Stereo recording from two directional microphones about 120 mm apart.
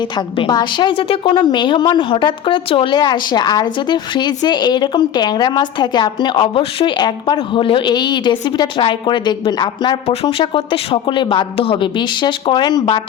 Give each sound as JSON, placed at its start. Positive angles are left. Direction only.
{"t": 0.3, "sound": "a woman's voice", "side_deg": 40}